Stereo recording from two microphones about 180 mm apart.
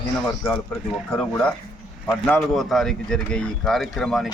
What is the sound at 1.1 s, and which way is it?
A man's voice, 10° left (ahead or behind).